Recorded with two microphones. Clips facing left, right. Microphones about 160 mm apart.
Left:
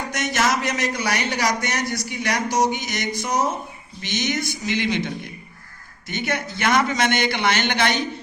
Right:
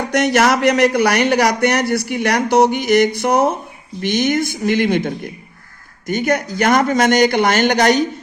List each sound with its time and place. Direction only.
0.1 s speech: 60° right (ahead or behind); by 8.0 s 45° right (ahead or behind)